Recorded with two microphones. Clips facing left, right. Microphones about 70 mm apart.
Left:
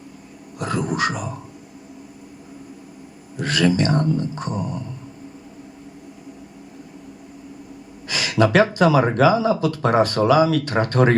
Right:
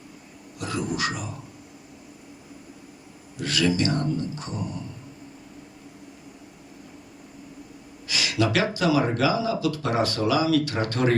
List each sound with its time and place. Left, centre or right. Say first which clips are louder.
0.6 s dog: left 5 dB; left
3.3 s speech: left 5 dB; left
8.0 s speech: left 6 dB; left